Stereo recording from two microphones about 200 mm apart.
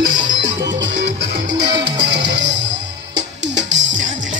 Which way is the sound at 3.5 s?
65° right (ahead or behind).